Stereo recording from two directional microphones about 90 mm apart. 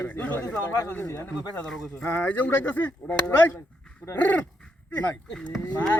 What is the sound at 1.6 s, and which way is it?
Speech, 10° left (ahead or behind).